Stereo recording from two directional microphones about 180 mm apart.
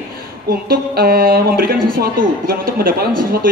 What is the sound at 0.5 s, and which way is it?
A woman's voice, 55° right (ahead or behind).